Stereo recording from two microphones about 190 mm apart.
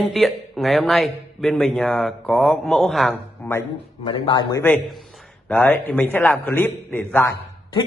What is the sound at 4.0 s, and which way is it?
Speech, 25° left (ahead or behind).